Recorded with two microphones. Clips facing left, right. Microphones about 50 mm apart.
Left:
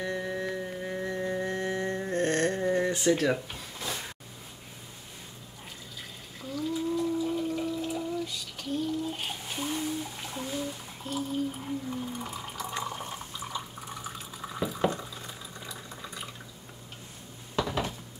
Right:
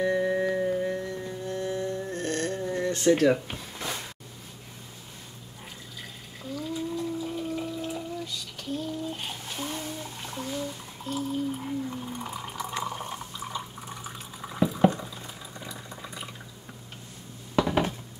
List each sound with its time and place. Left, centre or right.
0.0 s music: centre
0.9 s music: left
3.1 s speech: centre
3.7 s a sound: centre
6.5 s water: centre
9.1 s a sound: centre
12.8 s water: centre
15.6 s boiling: centre
17.6 s a sound: right